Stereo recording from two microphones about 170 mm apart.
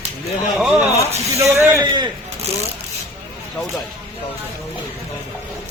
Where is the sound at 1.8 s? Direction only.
25° right (ahead or behind).